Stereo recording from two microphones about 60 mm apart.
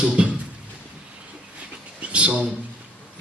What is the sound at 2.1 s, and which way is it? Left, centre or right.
Speech, centre.